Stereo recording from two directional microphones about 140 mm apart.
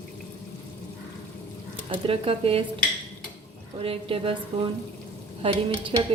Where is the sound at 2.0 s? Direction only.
40° right (ahead or behind).